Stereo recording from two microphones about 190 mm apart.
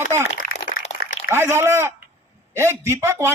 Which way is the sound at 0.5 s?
35° left (ahead or behind).